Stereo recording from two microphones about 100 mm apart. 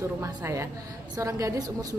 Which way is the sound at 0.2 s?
30° right (ahead or behind).